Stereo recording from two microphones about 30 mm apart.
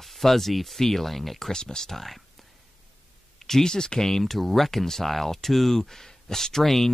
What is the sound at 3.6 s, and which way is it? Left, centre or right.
Speech, left.